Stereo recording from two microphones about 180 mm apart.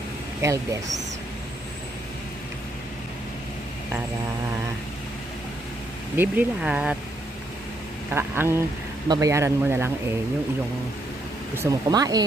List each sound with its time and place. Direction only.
0.4 s speech: 15° right (ahead or behind)
6.1 s speech: 5° right (ahead or behind)
8.1 s speech: 15° right (ahead or behind)
11.5 s speech: 20° right (ahead or behind)